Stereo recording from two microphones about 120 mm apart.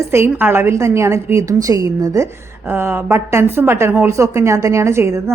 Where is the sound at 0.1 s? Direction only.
20° right (ahead or behind).